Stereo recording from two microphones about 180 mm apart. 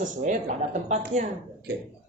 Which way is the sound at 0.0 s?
45° right (ahead or behind).